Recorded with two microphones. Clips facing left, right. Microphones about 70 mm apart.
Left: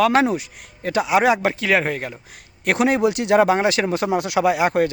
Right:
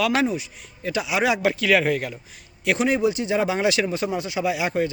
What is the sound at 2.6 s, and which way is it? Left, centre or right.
Speech, left.